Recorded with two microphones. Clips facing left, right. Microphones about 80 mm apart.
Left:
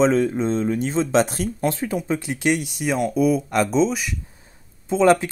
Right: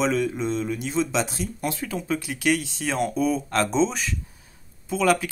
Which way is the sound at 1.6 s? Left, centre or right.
Left.